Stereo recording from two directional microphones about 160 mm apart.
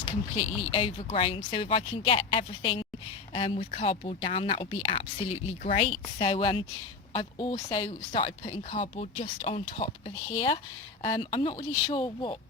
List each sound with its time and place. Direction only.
0.3 s speech: 40° left (ahead or behind)